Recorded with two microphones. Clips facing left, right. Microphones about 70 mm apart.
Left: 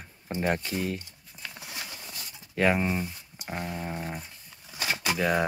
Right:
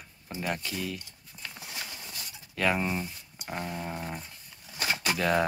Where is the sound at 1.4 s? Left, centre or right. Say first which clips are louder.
Left 1 dB; centre.